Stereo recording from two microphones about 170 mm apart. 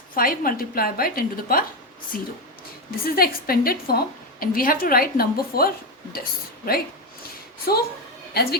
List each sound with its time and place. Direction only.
0.1 s a woman's voice: 55° left (ahead or behind)
7.7 s a woman's voice: 65° left (ahead or behind)